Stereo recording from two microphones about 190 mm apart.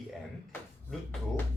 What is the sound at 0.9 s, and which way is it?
Speech, 5° left (ahead or behind).